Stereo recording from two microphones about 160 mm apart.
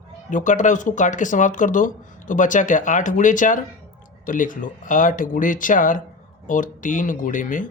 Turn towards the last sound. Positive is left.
turn(degrees=55)  # may be behind; listen again after turning